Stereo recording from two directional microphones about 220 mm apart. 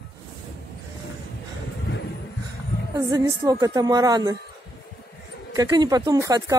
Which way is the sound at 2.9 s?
15° right (ahead or behind).